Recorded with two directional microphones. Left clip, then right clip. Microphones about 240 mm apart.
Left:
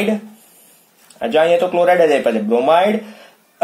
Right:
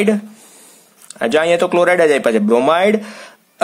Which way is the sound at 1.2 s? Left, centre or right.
Right.